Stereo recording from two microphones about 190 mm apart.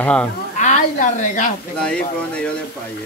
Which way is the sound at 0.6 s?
40° left (ahead or behind).